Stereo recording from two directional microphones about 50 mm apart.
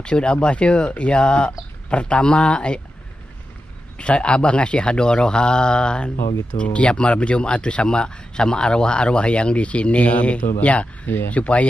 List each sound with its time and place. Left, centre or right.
0.0 s speech: centre
4.0 s speech: left